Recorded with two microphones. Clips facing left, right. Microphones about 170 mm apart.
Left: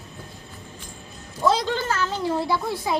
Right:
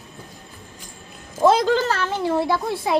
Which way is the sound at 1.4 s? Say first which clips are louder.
Right 6 dB; 50° right (ahead or behind).